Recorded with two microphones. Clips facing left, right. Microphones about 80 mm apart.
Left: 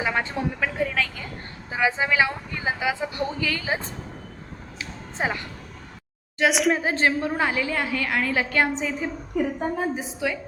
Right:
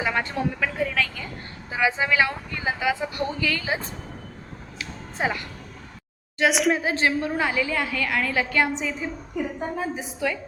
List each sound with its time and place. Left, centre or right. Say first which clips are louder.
0.0 s speech: even; centre
0.8 s a sound: even; left
1.7 s speech: even; left
4.8 s a sound: right 1 dB; left
6.4 s a woman's voice: even; centre
6.8 s a woman's voice: left 1 dB; left